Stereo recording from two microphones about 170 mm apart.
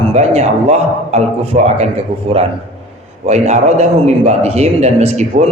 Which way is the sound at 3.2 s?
40° right (ahead or behind).